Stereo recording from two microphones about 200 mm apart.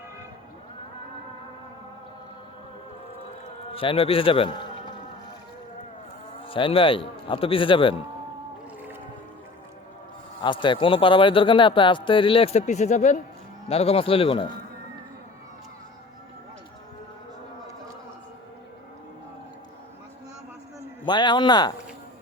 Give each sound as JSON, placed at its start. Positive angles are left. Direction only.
{"t": 3.7, "sound": "speech", "side_deg": 25}
{"t": 6.4, "sound": "speech", "side_deg": 25}
{"t": 10.4, "sound": "speech", "side_deg": 25}
{"t": 21.0, "sound": "speech", "side_deg": 20}